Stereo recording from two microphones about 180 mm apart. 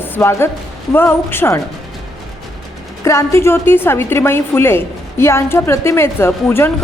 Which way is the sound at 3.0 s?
15° left (ahead or behind).